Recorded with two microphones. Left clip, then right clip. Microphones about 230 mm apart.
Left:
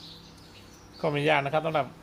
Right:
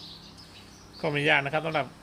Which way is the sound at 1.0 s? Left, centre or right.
Centre.